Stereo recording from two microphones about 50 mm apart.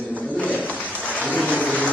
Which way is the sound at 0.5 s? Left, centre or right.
Right.